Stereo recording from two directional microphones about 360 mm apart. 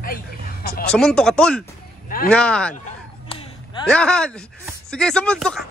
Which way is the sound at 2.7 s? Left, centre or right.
Centre.